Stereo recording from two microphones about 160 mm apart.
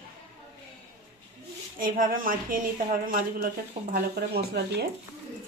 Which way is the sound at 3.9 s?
80° right.